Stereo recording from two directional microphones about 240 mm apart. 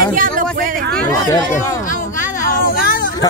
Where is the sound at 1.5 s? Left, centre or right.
Left.